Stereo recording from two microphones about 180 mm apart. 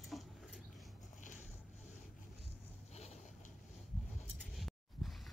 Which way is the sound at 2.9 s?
35° left (ahead or behind).